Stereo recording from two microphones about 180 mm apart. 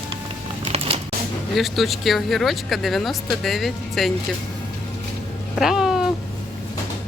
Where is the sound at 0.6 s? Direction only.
35° right (ahead or behind).